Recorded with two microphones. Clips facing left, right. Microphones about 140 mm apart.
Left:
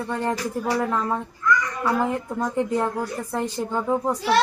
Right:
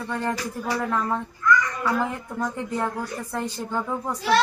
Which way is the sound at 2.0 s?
20° left (ahead or behind).